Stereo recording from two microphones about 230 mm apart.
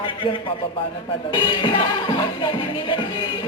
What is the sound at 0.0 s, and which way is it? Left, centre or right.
Music, left.